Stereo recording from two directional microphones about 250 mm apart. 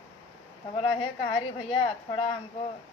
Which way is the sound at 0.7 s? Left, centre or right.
Left.